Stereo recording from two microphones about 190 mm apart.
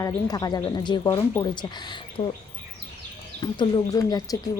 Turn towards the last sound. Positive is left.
turn(degrees=20)  # may be behind; listen again after turning